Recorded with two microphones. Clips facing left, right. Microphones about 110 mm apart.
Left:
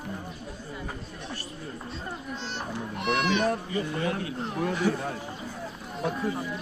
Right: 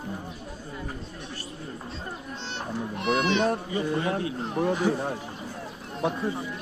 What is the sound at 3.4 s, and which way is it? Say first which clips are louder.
Speech: right 1 dB; 30° right (ahead or behind).